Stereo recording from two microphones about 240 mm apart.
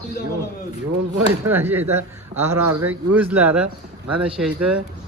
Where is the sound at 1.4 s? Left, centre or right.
Centre.